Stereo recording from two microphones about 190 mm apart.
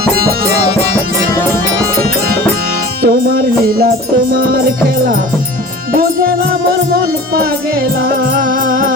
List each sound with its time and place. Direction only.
3.0 s music: 50° right (ahead or behind)
6.0 s music: 50° right (ahead or behind)
8.0 s music: 45° right (ahead or behind)